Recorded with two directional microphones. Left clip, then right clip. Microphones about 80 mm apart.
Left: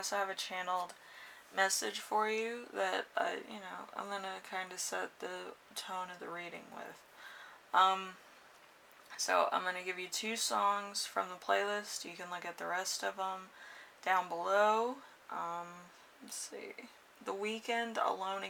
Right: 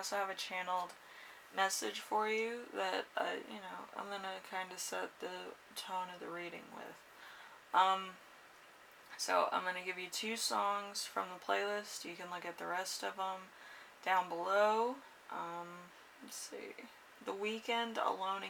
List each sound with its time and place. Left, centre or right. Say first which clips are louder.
0.0 s speech: left 2 dB; left
9.1 s speech: left 2 dB; left
17.2 s speech: left 1 dB; left